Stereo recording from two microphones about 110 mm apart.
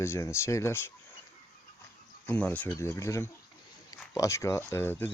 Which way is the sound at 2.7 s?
25° left (ahead or behind).